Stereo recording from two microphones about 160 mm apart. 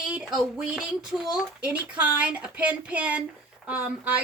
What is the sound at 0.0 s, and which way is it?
Speech, 5° right (ahead or behind).